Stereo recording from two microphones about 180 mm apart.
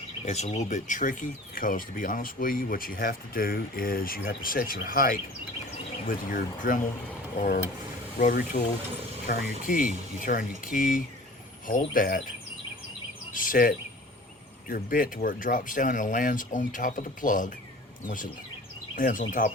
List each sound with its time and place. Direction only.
0.3 s speech: 40° left (ahead or behind)
13.3 s speech: 50° left (ahead or behind)